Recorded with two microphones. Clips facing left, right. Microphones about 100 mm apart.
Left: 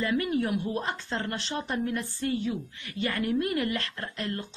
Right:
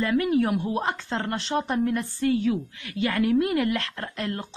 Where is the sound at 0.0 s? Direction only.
65° right (ahead or behind).